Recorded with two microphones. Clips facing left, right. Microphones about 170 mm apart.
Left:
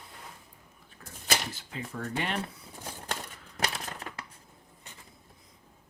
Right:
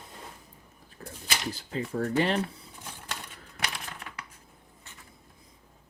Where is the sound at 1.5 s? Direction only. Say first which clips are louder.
Right 7 dB; 35° right (ahead or behind).